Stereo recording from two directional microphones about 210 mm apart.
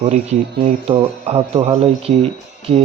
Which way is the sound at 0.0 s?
35° right (ahead or behind).